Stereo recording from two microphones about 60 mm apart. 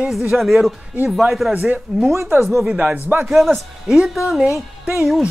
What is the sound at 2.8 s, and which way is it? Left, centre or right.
Speech, right.